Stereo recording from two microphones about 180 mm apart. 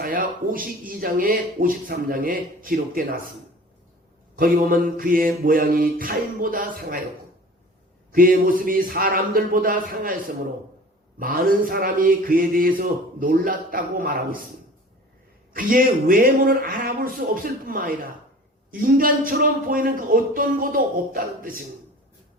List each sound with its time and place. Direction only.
0.0 s speech: 50° right (ahead or behind)
4.4 s speech: 50° right (ahead or behind)
8.1 s speech: 50° right (ahead or behind)
11.2 s speech: 55° right (ahead or behind)
15.5 s speech: 50° right (ahead or behind)